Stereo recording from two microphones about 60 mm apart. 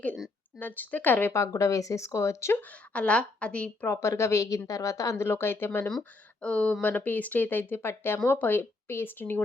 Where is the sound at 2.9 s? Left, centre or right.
Left.